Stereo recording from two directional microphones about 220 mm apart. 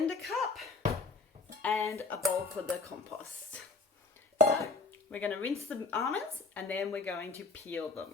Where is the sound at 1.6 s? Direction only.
10° left (ahead or behind).